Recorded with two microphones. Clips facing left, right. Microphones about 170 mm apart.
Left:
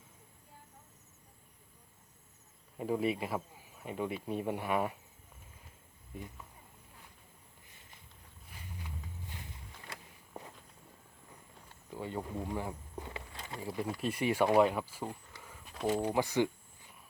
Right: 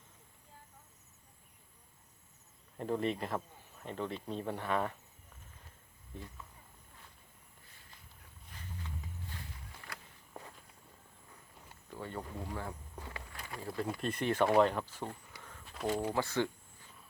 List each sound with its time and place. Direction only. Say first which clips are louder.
2.7 s speech: left 2 dB; 5° left (ahead or behind)
6.1 s speech: left 2 dB; 15° left (ahead or behind)
8.8 s walk: right 1 dB; 15° left (ahead or behind)
11.9 s a sound: left 3 dB; 15° left (ahead or behind)
13.7 s speech: left 1 dB; 5° left (ahead or behind)
15.4 s a sound: even; 10° left (ahead or behind)
15.9 s speech: left 3 dB; 15° left (ahead or behind)